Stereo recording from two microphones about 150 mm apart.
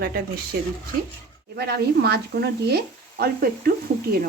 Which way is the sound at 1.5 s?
90° right.